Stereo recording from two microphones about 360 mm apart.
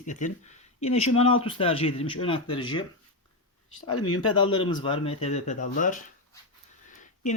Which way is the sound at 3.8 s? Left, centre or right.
Left.